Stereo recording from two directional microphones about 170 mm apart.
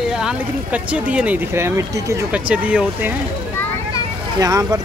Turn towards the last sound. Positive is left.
turn(degrees=-20)  # may be behind; listen again after turning